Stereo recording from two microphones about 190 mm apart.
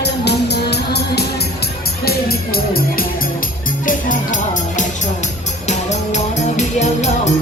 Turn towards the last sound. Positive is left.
turn(degrees=35)  # may be behind; listen again after turning